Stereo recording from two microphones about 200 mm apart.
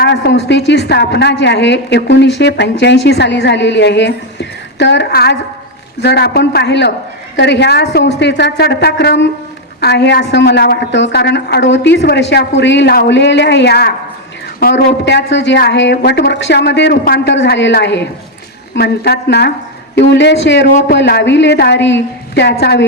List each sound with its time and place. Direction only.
0.0 s a woman's voice: 55° left (ahead or behind)